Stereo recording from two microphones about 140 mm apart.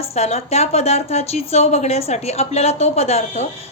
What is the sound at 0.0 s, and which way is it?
A woman's voice, 50° left (ahead or behind).